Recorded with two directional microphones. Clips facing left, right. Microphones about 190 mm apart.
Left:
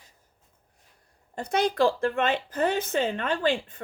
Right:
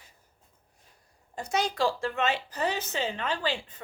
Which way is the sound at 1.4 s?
55° left (ahead or behind).